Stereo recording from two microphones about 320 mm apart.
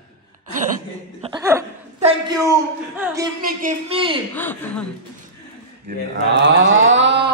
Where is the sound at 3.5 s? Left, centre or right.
Right.